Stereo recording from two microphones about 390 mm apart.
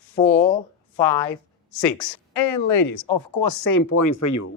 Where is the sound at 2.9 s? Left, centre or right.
Left.